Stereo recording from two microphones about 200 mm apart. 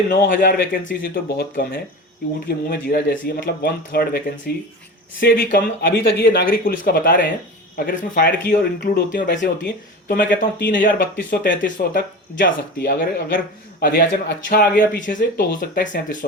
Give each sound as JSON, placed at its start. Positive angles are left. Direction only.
{"t": 0.1, "sound": "speech", "side_deg": 45}
{"t": 10.7, "sound": "speech", "side_deg": 45}